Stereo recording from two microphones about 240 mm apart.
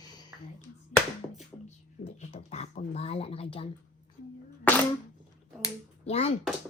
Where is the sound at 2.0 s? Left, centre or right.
Left.